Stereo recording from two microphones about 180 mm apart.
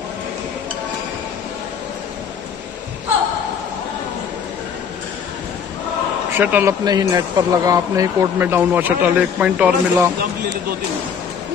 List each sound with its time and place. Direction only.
6.3 s speech: 10° right (ahead or behind)